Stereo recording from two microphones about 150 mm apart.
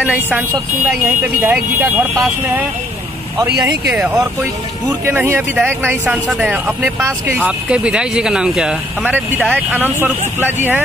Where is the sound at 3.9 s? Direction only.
10° right (ahead or behind).